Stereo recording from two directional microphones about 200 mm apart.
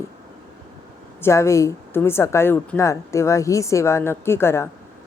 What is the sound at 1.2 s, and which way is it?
A woman's voice, 15° left (ahead or behind).